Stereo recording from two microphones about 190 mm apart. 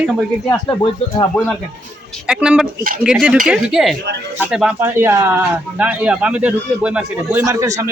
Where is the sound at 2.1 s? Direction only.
5° right (ahead or behind).